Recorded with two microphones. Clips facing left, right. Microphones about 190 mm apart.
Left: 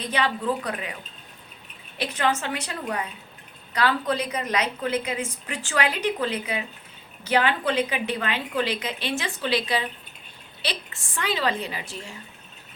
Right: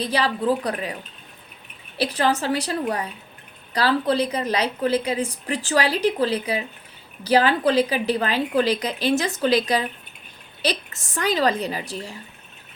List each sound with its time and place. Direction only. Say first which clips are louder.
0.0 s a woman's voice: right 4 dB; 35° right (ahead or behind)
2.0 s a woman's voice: right 4 dB; 35° right (ahead or behind)